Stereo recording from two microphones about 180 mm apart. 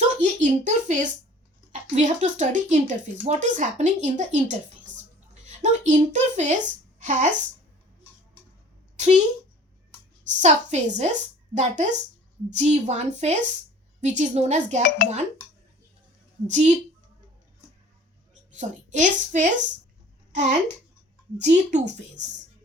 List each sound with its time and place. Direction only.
0.2 s a sound: 45° right (ahead or behind)
1.7 s speech: 45° right (ahead or behind)
9.0 s a woman's voice: 40° right (ahead or behind)
10.4 s a woman's voice: 40° right (ahead or behind)
14.8 s speech: 50° left (ahead or behind)
16.5 s a woman's voice: 40° right (ahead or behind)
18.5 s a woman's voice: 45° right (ahead or behind)